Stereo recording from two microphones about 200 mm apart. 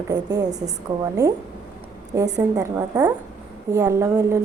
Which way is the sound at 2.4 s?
15° right (ahead or behind).